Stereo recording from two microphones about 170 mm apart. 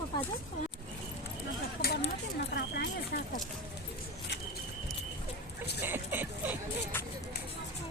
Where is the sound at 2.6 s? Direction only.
70° left (ahead or behind).